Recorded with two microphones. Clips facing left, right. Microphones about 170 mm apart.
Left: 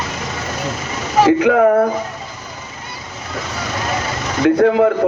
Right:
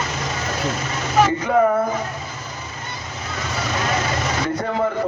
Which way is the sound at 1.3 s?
70° left (ahead or behind).